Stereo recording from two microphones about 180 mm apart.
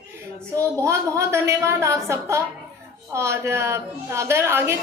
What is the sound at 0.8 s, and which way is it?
A woman's voice, 15° right (ahead or behind).